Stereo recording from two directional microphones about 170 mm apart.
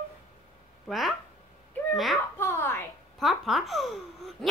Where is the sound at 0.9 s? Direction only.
Centre (ahead or behind).